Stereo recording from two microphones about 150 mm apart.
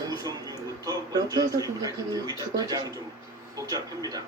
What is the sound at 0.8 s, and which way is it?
Speech, 25° right (ahead or behind).